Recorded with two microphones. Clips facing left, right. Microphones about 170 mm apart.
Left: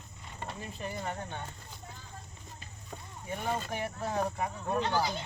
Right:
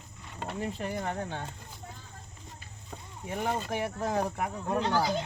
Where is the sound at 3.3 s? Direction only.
90° right.